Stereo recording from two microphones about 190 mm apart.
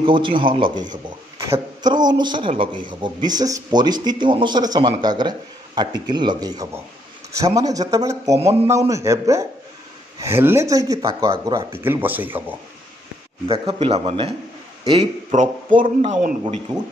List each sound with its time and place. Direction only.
0.0 s a man's voice: 25° right (ahead or behind); by 12.5 s 10° right (ahead or behind)
13.5 s a man's voice: 30° right (ahead or behind)